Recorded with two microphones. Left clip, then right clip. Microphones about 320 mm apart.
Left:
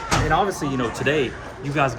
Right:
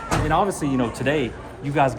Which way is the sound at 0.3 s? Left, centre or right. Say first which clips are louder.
Right 3 dB; right.